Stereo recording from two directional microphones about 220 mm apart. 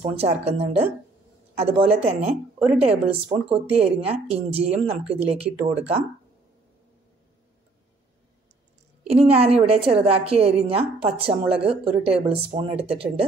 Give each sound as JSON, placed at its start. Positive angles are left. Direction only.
{"t": 0.1, "sound": "a woman's voice", "side_deg": -25}
{"t": 9.0, "sound": "a woman's voice", "side_deg": -25}